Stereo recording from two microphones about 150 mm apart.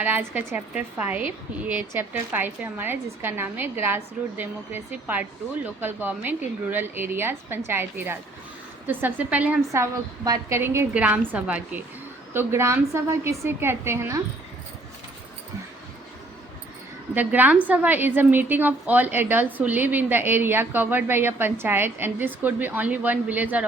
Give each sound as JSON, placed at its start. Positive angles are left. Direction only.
{"t": 0.0, "sound": "a woman's voice", "side_deg": -10}
{"t": 17.2, "sound": "a woman's voice", "side_deg": -10}